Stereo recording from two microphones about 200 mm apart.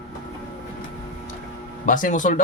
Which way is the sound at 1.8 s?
40° left (ahead or behind).